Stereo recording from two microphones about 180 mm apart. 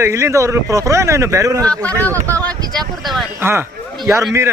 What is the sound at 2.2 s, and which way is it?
Speech, 10° left (ahead or behind).